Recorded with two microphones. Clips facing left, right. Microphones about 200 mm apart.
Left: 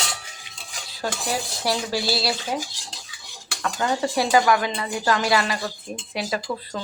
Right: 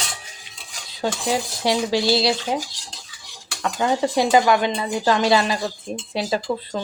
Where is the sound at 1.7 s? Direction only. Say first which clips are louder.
Right 6 dB; 20° right (ahead or behind).